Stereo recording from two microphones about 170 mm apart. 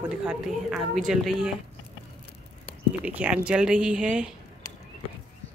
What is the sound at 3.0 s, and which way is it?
Speech, 10° right (ahead or behind).